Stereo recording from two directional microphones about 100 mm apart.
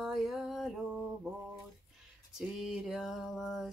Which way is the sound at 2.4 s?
5° right (ahead or behind).